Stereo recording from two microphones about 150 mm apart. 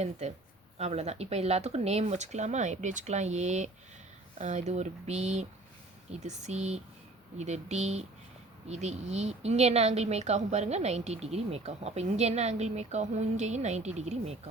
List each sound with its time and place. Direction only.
0.0 s a woman's voice: 50° right (ahead or behind)